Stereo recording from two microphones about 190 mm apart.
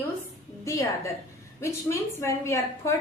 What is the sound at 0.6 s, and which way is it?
A woman's voice, 15° left (ahead or behind).